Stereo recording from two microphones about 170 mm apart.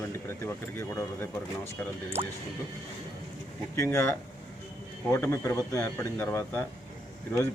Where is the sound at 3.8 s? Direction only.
10° left (ahead or behind).